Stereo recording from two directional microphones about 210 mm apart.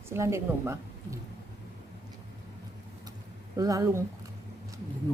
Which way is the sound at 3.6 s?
15° right (ahead or behind).